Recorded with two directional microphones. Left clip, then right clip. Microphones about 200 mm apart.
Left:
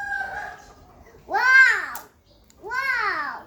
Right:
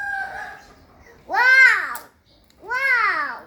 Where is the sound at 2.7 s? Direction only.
20° right (ahead or behind).